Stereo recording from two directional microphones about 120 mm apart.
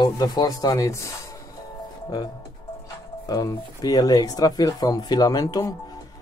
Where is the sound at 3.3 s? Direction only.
30° left (ahead or behind).